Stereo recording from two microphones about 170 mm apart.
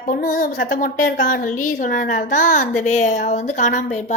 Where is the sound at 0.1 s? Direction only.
50° left (ahead or behind).